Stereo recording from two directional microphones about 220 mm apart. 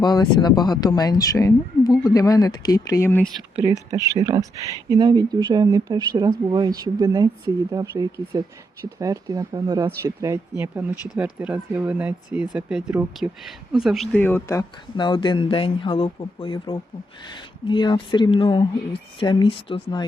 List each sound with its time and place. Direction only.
0.0 s speech: 20° left (ahead or behind)
3.5 s speech: 20° right (ahead or behind); by 20.1 s 20° left (ahead or behind)